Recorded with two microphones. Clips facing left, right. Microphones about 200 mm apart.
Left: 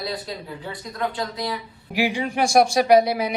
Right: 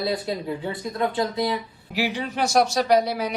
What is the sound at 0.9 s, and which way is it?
Speech, 25° right (ahead or behind).